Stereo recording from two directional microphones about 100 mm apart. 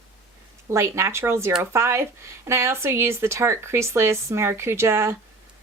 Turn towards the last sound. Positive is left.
turn(degrees=-25)  # may be behind; listen again after turning